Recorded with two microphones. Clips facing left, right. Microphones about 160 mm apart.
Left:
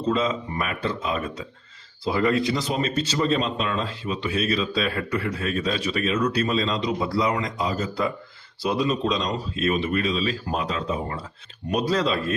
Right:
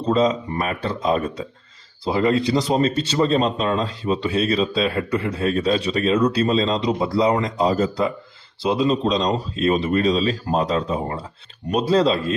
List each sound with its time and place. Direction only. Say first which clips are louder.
0.0 s speech: right 5 dB; 35° right (ahead or behind)
8.6 s speech: right 4 dB; 25° right (ahead or behind)